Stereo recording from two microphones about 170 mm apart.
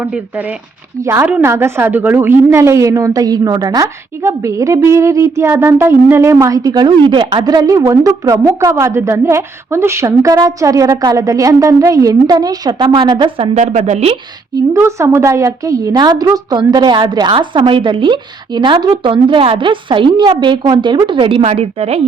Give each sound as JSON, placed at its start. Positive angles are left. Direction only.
{"t": 0.0, "sound": "a woman's voice", "side_deg": -10}
{"t": 13.5, "sound": "speech", "side_deg": -45}
{"t": 14.5, "sound": "a woman's voice", "side_deg": -15}